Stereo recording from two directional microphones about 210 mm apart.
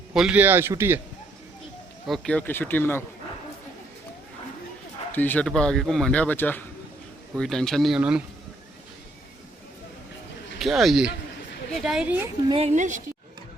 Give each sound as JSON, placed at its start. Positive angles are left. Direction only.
{"t": 0.1, "sound": "a man's voice", "side_deg": -5}
{"t": 2.0, "sound": "speech", "side_deg": 0}
{"t": 5.1, "sound": "speech", "side_deg": 10}
{"t": 10.6, "sound": "speech", "side_deg": 0}
{"t": 12.5, "sound": "speech", "side_deg": -30}